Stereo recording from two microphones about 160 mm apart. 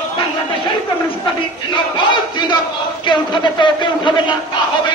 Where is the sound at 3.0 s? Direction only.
30° left (ahead or behind).